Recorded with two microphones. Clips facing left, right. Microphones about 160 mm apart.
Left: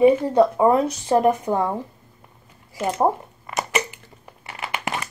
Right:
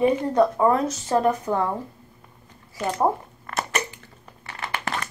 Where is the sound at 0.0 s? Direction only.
15° left (ahead or behind).